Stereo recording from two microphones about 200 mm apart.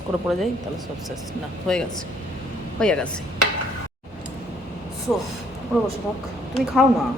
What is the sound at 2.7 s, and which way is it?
Speech, 5° left (ahead or behind).